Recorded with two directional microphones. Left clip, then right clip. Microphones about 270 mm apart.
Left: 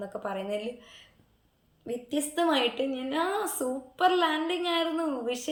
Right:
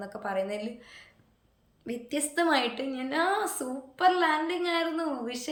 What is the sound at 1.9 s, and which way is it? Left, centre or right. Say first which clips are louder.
A woman's voice: left 1 dB; centre.